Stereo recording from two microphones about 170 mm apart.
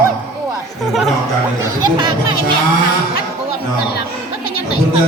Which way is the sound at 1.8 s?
25° right (ahead or behind).